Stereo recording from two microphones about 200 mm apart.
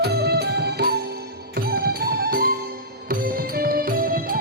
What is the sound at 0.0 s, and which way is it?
Music, 55° right (ahead or behind).